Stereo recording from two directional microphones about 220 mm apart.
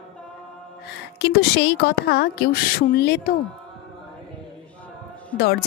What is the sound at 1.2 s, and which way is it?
A woman's voice, 50° left (ahead or behind).